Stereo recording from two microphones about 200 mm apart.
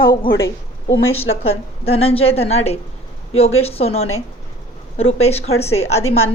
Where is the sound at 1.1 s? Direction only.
30° left (ahead or behind).